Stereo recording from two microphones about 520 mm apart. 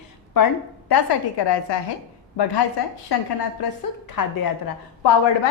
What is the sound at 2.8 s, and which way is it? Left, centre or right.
Speech, left.